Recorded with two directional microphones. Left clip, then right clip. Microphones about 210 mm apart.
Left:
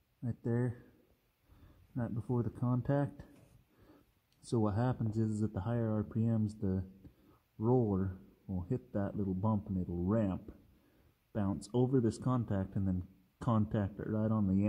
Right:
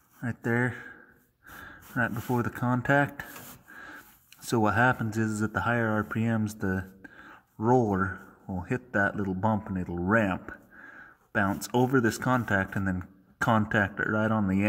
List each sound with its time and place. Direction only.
0.4 s speech: 10° right (ahead or behind)
2.0 s speech: 15° right (ahead or behind)
4.5 s speech: 15° right (ahead or behind)